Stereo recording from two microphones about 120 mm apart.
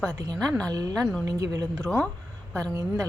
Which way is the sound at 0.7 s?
30° right (ahead or behind).